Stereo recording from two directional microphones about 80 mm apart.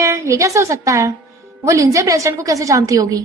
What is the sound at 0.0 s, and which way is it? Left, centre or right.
A woman's voice, right.